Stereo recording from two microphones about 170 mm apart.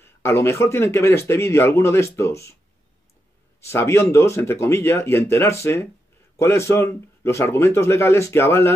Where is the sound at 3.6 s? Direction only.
15° left (ahead or behind).